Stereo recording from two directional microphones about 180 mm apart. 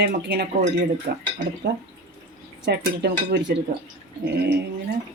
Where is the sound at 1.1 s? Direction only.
55° right (ahead or behind).